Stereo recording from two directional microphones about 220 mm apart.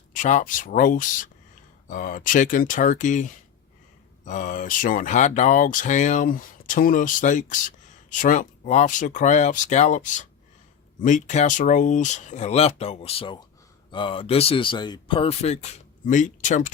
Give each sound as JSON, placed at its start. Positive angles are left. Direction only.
{"t": 0.1, "sound": "speech", "side_deg": 35}